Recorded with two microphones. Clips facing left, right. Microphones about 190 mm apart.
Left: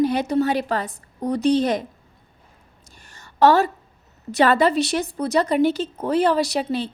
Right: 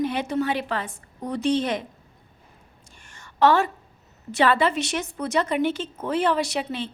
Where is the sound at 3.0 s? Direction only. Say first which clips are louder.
Left 3 dB; 35° left (ahead or behind).